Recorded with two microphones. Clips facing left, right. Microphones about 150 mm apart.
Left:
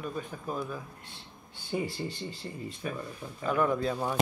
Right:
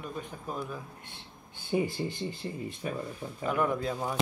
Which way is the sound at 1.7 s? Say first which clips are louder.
Right 3 dB; 15° right (ahead or behind).